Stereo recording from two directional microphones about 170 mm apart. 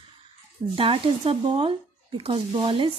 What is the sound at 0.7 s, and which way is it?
Speech, 30° right (ahead or behind).